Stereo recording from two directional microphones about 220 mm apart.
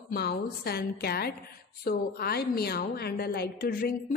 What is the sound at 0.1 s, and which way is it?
A woman's voice, 45° left (ahead or behind).